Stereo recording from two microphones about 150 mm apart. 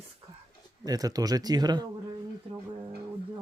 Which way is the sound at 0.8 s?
25° right (ahead or behind).